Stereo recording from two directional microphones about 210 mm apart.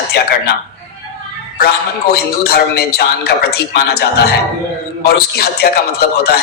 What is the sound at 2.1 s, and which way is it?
Speech, 50° left (ahead or behind).